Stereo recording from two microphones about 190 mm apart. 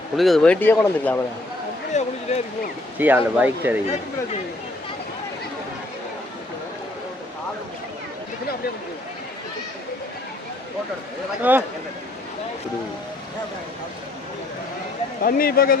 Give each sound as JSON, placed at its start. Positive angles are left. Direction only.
{"t": 0.2, "sound": "speech", "side_deg": 0}
{"t": 1.9, "sound": "speech", "side_deg": 35}
{"t": 3.0, "sound": "speech", "side_deg": -10}
{"t": 11.5, "sound": "speech", "side_deg": -10}
{"t": 15.2, "sound": "speech", "side_deg": 50}